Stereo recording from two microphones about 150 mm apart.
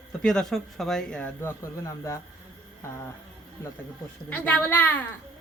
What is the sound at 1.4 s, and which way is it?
Speech, 20° left (ahead or behind).